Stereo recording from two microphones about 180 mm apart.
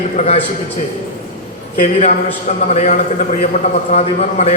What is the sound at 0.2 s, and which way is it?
Speech, 40° left (ahead or behind).